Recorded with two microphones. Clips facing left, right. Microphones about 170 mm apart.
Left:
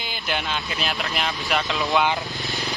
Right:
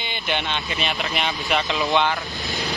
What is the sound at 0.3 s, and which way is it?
Speech, centre (ahead or behind).